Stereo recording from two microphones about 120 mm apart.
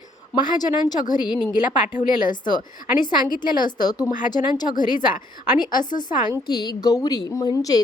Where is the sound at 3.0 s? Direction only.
35° left (ahead or behind).